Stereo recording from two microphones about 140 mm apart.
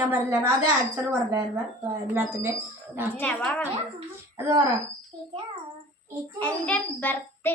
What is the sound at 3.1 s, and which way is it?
Speech, 10° left (ahead or behind).